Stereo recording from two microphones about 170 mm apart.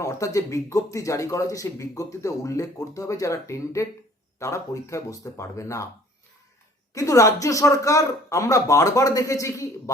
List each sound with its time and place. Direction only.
0.0 s speech: 20° left (ahead or behind)
6.9 s speech: 20° left (ahead or behind)